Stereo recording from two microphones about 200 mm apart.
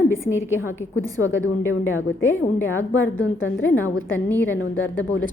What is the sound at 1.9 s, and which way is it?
A woman's voice, 75° left (ahead or behind).